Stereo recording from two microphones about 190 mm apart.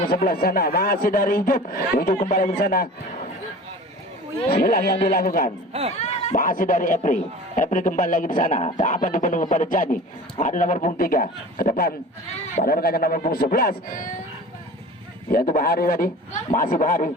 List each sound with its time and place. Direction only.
0.1 s speech: 50° left (ahead or behind)
4.4 s speech: 55° left (ahead or behind)
6.0 s speech: 40° left (ahead or behind)
15.3 s speech: 50° left (ahead or behind)